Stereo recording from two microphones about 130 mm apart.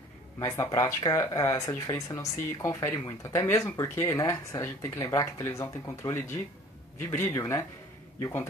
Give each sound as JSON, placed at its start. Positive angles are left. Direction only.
{"t": 0.7, "sound": "speech", "side_deg": 30}